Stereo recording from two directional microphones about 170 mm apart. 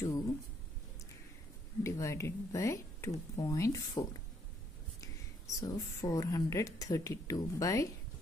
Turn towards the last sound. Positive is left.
turn(degrees=20)  # may be behind; listen again after turning